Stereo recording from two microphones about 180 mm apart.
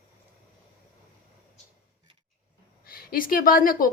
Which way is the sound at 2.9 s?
55° left (ahead or behind).